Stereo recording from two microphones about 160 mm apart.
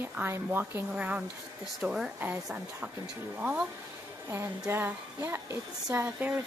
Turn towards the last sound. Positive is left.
turn(degrees=-15)  # may be behind; listen again after turning